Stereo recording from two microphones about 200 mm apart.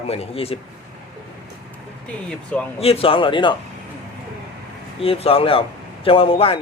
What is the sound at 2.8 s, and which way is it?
Speech, 30° left (ahead or behind).